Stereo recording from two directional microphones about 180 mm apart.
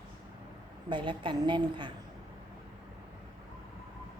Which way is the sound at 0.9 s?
25° right (ahead or behind).